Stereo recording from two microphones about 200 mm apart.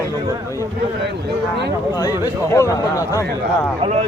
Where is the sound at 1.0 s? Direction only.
60° right (ahead or behind).